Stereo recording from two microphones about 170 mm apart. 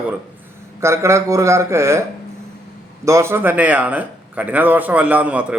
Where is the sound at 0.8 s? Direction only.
15° right (ahead or behind).